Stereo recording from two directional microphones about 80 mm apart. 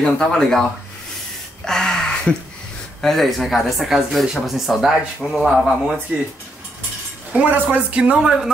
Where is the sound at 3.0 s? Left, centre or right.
Centre.